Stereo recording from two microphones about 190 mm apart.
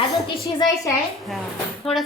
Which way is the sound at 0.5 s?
15° left (ahead or behind).